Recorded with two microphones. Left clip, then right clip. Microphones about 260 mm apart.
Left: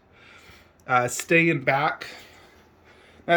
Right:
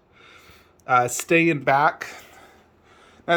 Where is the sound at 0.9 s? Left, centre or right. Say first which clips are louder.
Right 2 dB; centre.